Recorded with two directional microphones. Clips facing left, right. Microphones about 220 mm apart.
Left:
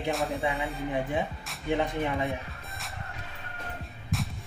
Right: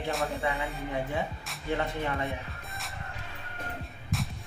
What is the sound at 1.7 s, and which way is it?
Speech, 15° left (ahead or behind).